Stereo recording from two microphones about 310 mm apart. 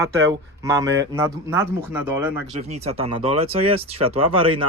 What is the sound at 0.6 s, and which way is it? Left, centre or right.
Speech, centre.